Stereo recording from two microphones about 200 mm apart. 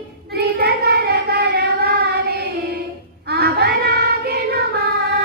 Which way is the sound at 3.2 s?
55° right (ahead or behind).